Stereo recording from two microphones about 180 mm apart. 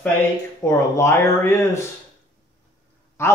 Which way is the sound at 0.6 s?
15° left (ahead or behind).